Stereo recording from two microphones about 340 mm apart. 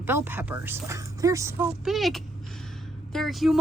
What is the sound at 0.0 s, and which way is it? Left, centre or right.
Speech, centre.